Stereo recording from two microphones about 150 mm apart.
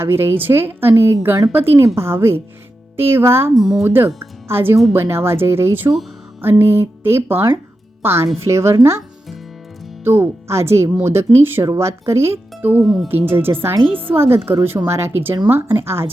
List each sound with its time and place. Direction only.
0.0 s a woman's voice: 15° right (ahead or behind)
3.5 s speech: centre (ahead or behind)
3.8 s a woman's voice: 15° right (ahead or behind)
12.8 s speech: centre (ahead or behind)
13.1 s a woman's voice: 15° right (ahead or behind)